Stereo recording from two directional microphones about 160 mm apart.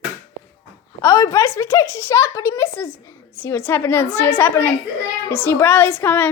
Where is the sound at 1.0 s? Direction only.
20° left (ahead or behind).